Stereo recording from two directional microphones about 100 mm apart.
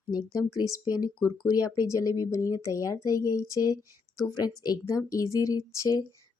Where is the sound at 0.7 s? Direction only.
40° left (ahead or behind).